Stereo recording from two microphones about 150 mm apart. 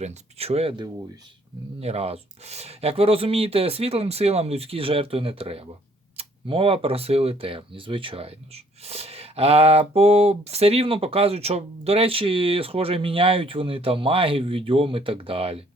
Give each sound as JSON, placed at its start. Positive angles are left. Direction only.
{"t": 0.0, "sound": "speech", "side_deg": -45}